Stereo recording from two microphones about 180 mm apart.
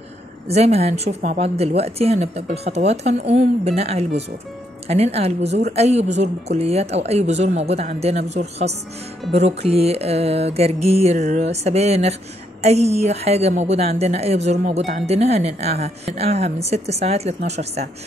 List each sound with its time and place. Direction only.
0.5 s music: 35° right (ahead or behind)